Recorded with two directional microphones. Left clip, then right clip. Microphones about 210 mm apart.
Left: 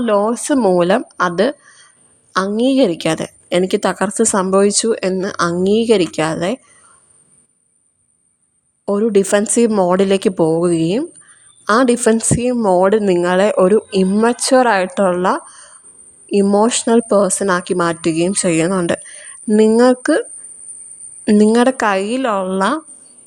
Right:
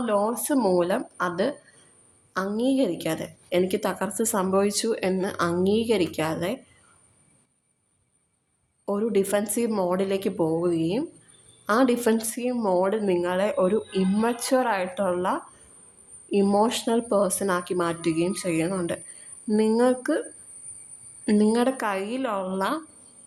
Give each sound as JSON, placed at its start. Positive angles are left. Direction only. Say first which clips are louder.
{"t": 0.0, "sound": "a woman's voice", "louder": "left 9 dB", "side_deg": 35}
{"t": 8.8, "sound": "a woman's voice", "louder": "left 10 dB", "side_deg": 35}
{"t": 21.2, "sound": "a woman's voice", "louder": "left 10 dB", "side_deg": 40}